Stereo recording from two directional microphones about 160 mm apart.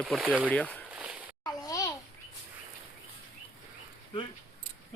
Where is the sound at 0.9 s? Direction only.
10° right (ahead or behind).